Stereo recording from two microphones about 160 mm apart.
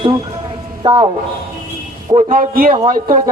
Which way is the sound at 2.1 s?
60° right (ahead or behind).